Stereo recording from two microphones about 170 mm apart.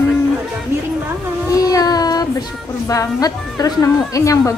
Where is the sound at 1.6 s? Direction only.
20° left (ahead or behind).